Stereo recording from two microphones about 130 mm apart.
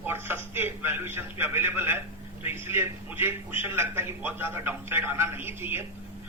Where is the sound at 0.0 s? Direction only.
15° right (ahead or behind).